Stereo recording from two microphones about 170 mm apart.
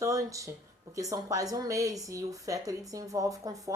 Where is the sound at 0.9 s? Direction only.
20° right (ahead or behind).